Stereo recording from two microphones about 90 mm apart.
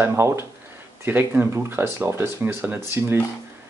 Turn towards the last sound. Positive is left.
turn(degrees=-25)  # may be behind; listen again after turning